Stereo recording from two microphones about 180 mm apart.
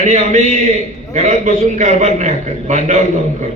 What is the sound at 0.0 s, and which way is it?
A man's voice, 40° right (ahead or behind).